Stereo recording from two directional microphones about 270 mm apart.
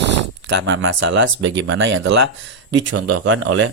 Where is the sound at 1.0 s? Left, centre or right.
Right.